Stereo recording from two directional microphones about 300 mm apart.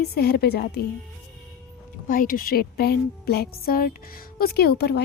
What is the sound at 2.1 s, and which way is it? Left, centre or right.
A woman's voice, left.